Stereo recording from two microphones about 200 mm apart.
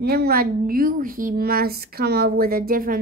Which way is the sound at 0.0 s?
50° right (ahead or behind).